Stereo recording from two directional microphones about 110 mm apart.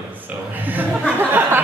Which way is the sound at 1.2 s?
20° right (ahead or behind).